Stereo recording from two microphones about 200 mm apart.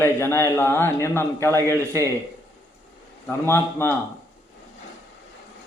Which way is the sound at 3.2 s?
10° left (ahead or behind).